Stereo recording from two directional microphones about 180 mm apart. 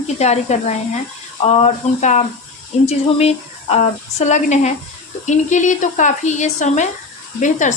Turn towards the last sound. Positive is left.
turn(degrees=45)  # may be behind; listen again after turning